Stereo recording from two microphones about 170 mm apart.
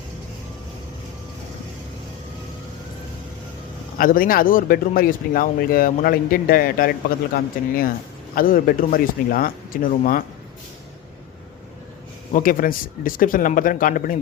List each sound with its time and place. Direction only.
3.9 s speech: 55° left (ahead or behind)
12.3 s speech: 55° left (ahead or behind)